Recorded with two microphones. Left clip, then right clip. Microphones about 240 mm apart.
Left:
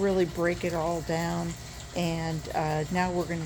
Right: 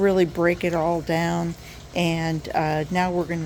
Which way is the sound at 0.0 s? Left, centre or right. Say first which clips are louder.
Right 7 dB; right.